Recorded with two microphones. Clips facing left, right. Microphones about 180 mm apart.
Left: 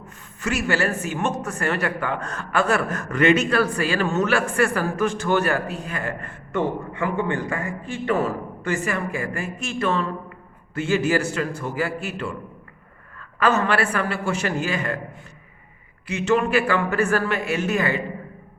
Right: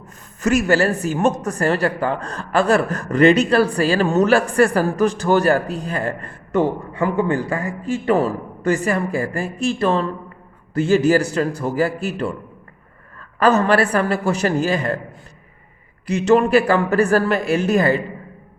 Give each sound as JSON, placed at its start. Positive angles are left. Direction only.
{"t": 0.4, "sound": "speech", "side_deg": -40}
{"t": 16.0, "sound": "speech", "side_deg": -40}